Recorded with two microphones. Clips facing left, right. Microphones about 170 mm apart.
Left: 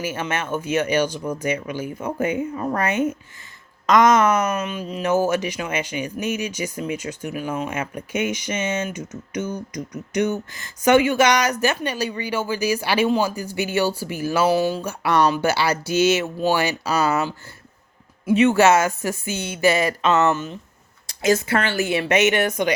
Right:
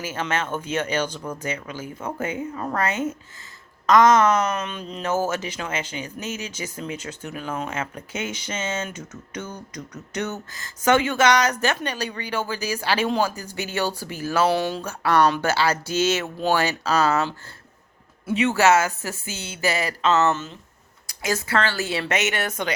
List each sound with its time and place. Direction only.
0.0 s speech: 15° left (ahead or behind)
21.1 s speech: 25° left (ahead or behind)